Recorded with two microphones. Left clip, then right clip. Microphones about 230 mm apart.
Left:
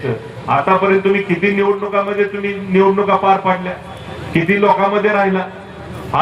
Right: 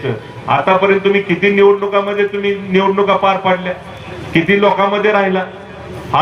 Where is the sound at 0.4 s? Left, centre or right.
Right.